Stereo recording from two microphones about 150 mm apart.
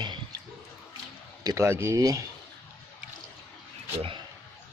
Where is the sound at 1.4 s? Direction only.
20° right (ahead or behind).